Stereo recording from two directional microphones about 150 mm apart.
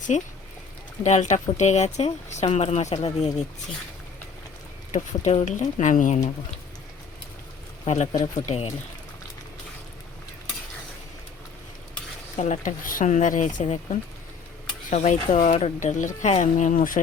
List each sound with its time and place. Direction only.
1.0 s speech: 50° left (ahead or behind)
4.9 s speech: 50° left (ahead or behind)
7.9 s speech: 50° left (ahead or behind)
12.4 s speech: 55° left (ahead or behind)
14.8 s speech: 55° left (ahead or behind)